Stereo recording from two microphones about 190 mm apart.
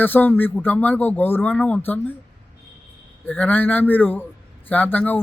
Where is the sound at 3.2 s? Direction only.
10° left (ahead or behind).